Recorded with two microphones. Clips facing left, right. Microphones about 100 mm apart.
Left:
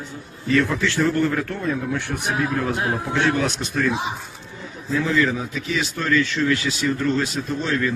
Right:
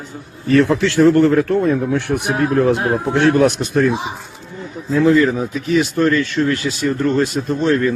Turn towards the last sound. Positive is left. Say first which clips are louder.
# right 7 dB
turn(degrees=-50)  # may be behind; listen again after turning